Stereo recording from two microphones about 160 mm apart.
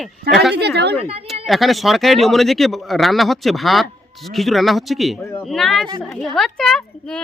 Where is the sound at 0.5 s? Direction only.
90° right.